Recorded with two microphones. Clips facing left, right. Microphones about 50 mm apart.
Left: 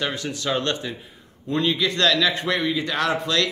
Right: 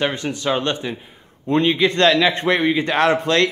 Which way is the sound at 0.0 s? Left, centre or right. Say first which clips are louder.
Right 5 dB; right.